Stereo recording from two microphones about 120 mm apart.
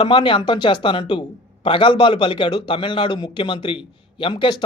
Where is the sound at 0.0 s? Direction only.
45° left (ahead or behind).